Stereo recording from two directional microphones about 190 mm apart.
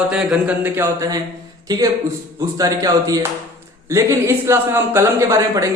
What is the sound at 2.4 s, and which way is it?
A man's voice, 20° right (ahead or behind).